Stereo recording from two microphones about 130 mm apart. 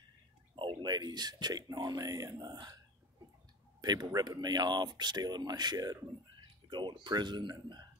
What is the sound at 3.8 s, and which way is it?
Speech, 30° right (ahead or behind).